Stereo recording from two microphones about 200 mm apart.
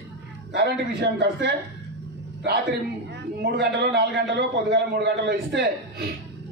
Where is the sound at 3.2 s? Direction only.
60° right (ahead or behind).